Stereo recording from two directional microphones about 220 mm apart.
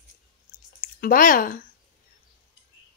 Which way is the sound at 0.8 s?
40° left (ahead or behind).